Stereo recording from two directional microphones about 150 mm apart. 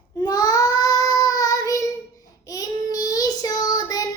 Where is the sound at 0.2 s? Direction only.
25° left (ahead or behind).